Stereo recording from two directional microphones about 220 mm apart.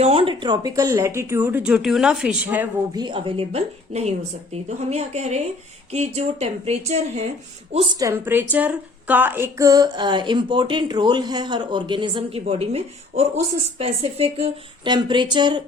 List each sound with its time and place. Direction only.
0.0 s speech: 25° right (ahead or behind); by 2.6 s 5° right (ahead or behind)
2.9 s speech: 20° right (ahead or behind)
8.0 s speech: 10° right (ahead or behind)